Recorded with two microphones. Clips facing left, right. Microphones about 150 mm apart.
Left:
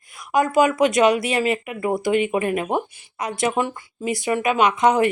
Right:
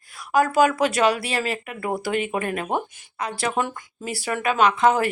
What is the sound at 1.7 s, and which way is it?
Speech, 10° left (ahead or behind).